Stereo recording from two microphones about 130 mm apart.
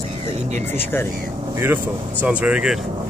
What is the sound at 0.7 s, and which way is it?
Speech, 15° left (ahead or behind).